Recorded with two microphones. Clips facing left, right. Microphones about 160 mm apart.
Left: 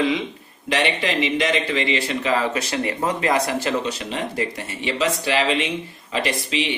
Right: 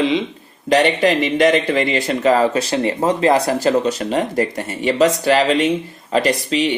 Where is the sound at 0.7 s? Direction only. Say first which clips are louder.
Right 8 dB; 45° right (ahead or behind).